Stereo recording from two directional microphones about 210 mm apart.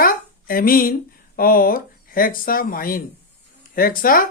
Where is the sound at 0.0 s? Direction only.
45° left (ahead or behind).